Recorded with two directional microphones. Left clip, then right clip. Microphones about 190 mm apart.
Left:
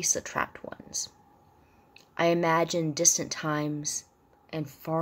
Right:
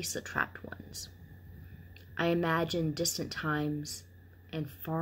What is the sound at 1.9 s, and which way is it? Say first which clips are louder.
A woman's voice: left 6 dB; 20° left (ahead or behind).